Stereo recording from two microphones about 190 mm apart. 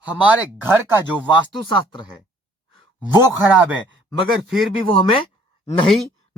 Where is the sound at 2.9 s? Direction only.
15° right (ahead or behind).